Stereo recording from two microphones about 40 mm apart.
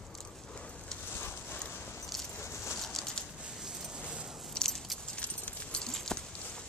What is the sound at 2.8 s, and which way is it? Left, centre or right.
Bird, centre.